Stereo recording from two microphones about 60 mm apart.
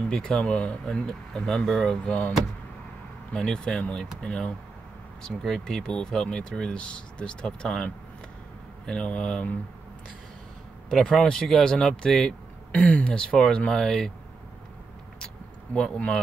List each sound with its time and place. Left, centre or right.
0.1 s speech: centre
3.3 s speech: centre
5.2 s speech: centre
10.9 s speech: centre
12.7 s speech: left
15.1 s vehicle: centre